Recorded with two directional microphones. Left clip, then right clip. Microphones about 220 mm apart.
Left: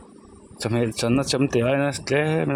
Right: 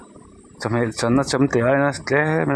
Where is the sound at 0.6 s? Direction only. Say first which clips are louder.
Right 2 dB; 20° left (ahead or behind).